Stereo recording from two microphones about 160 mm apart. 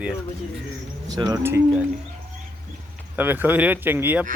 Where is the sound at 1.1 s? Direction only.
25° right (ahead or behind).